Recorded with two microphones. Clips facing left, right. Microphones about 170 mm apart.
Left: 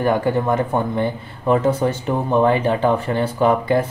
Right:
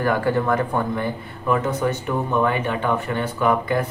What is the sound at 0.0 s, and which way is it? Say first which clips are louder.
Speech: left 2 dB; 20° left (ahead or behind).